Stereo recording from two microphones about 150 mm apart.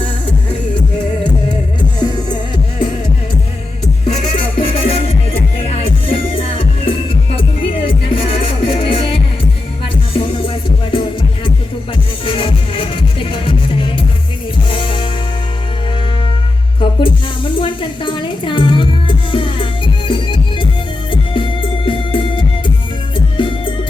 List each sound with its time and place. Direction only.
2.0 s music: 30° left (ahead or behind)
4.0 s music: 45° left (ahead or behind)
17.0 s music: 35° left (ahead or behind)